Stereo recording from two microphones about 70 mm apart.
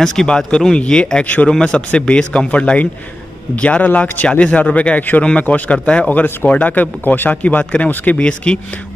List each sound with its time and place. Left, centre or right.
0.0 s speech: centre; by 1.5 s left
1.5 s speech: centre